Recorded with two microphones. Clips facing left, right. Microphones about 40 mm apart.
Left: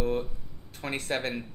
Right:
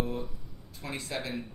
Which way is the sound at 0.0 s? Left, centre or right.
Left.